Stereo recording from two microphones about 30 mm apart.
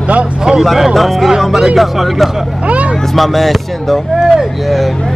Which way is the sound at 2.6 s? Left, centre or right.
Right.